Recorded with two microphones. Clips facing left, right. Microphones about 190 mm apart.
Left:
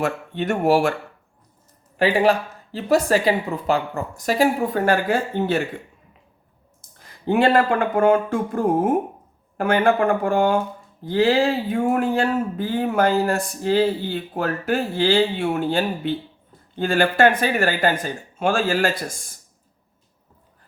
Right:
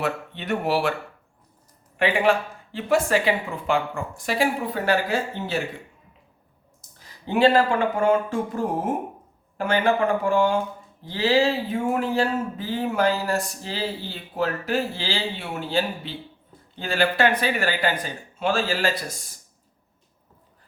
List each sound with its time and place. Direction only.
0.0 s speech: 45° left (ahead or behind)
2.0 s speech: 35° left (ahead or behind); by 5.6 s 55° left (ahead or behind)
7.3 s speech: 55° left (ahead or behind)